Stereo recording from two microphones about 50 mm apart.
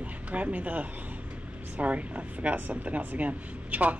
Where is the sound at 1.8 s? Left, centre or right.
Right.